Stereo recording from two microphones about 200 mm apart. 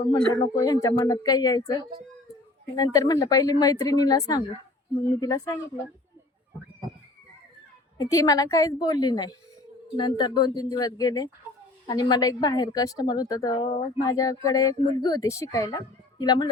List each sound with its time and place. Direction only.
0.3 s a woman's voice: 20° left (ahead or behind)
7.9 s a woman's voice: 20° left (ahead or behind)